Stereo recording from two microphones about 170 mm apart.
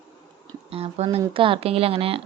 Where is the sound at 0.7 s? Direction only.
35° right (ahead or behind).